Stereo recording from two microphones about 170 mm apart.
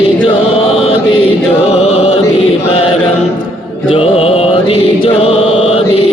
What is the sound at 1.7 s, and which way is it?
Music, 35° left (ahead or behind).